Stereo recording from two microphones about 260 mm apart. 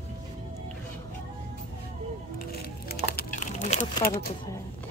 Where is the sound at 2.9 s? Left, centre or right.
Left.